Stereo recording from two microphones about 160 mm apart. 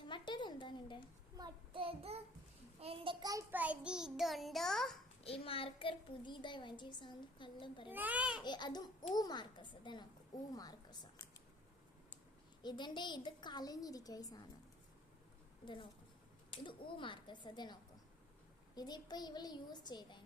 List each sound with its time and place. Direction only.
0.0 s a sound: 30° left (ahead or behind)
1.4 s child singing: 35° right (ahead or behind)
2.8 s a sound: 35° right (ahead or behind)
3.5 s child singing: 10° right (ahead or behind)
5.2 s a child's voice: 35° left (ahead or behind)
7.9 s a child's voice: 10° right (ahead or behind)
8.4 s a child's voice: 25° left (ahead or behind)
10.5 s a sound: 25° left (ahead or behind)
12.6 s a child's voice: 30° left (ahead or behind)
15.6 s a child's voice: 30° left (ahead or behind)